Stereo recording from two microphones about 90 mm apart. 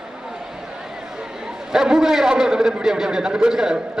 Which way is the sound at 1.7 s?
5° right (ahead or behind).